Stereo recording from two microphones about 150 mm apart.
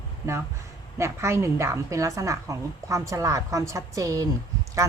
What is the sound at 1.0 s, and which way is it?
A woman's voice, 20° right (ahead or behind).